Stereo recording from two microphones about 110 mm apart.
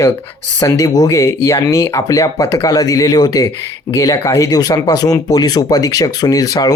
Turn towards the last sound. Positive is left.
turn(degrees=35)  # may be behind; listen again after turning